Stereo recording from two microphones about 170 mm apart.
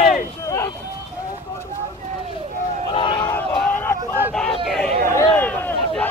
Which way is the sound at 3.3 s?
10° left (ahead or behind).